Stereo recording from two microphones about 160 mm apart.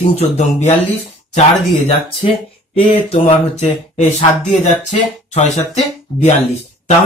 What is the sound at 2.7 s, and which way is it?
Speech, 35° left (ahead or behind).